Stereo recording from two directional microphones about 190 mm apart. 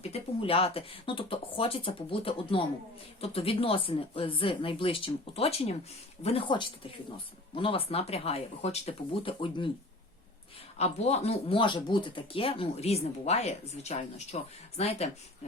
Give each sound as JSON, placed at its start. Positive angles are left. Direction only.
{"t": 0.0, "sound": "speech", "side_deg": 30}
{"t": 10.8, "sound": "speech", "side_deg": 35}